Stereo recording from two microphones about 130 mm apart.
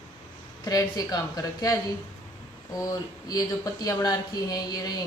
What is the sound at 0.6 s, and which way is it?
Speech, 30° left (ahead or behind).